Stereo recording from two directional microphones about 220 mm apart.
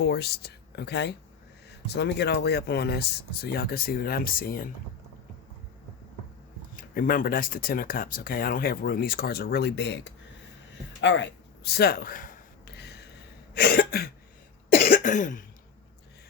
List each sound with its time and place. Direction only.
0.0 s speech: 45° left (ahead or behind)
6.7 s speech: 40° left (ahead or behind)
11.0 s a sound: 55° left (ahead or behind)
13.5 s cough: 45° left (ahead or behind)